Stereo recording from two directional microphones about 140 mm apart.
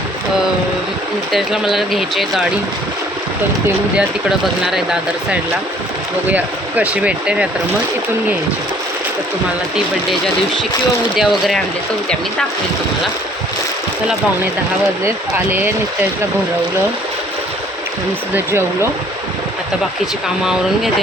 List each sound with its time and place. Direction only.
1.3 s speech: centre (ahead or behind)
3.9 s speech: 5° right (ahead or behind)
9.7 s speech: centre (ahead or behind)
15.0 s speech: 15° right (ahead or behind)
18.3 s speech: 15° right (ahead or behind)
20.2 s speech: 5° right (ahead or behind)